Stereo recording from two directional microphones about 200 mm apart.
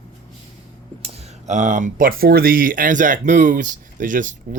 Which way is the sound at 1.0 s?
35° right (ahead or behind).